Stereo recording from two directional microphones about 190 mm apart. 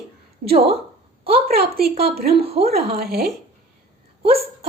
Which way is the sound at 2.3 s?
30° right (ahead or behind).